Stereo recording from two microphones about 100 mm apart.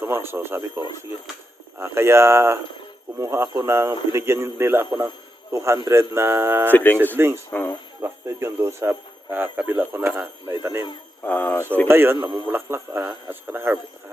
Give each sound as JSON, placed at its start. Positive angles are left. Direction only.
{"t": 0.0, "sound": "a man's voice", "side_deg": -25}
{"t": 6.7, "sound": "speech", "side_deg": 15}
{"t": 8.0, "sound": "a man's voice", "side_deg": -25}
{"t": 11.2, "sound": "speech", "side_deg": 15}
{"t": 11.9, "sound": "a man's voice", "side_deg": -25}